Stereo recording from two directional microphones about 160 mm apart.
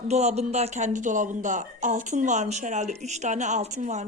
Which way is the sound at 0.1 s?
45° right (ahead or behind).